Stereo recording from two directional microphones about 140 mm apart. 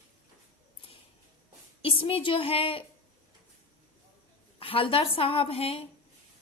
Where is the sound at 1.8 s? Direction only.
40° left (ahead or behind).